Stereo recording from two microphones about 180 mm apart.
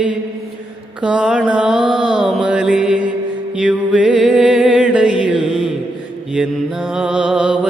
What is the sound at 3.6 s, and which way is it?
Music, 5° right (ahead or behind).